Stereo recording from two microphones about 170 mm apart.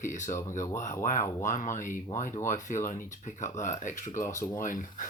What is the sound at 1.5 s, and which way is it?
Speech, 50° left (ahead or behind).